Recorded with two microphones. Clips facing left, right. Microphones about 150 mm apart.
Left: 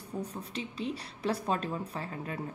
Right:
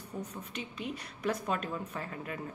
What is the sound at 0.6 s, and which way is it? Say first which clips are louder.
A woman's voice: left 4 dB; 30° left (ahead or behind).